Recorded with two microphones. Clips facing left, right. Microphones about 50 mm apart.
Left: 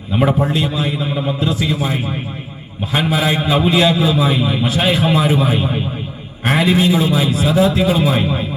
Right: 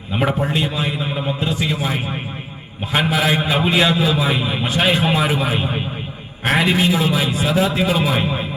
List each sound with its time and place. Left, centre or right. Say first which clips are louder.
0.6 s a man's voice: left 2 dB; centre
3.0 s a man's voice: left 1 dB; centre
3.6 s a man's voice: left 3 dB; centre
4.0 s a man's voice: left 3 dB; centre
4.3 s a man's voice: left 3 dB; centre
7.3 s a man's voice: left 4 dB; centre